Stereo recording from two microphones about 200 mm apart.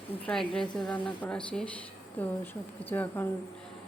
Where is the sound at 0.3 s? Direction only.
5° left (ahead or behind).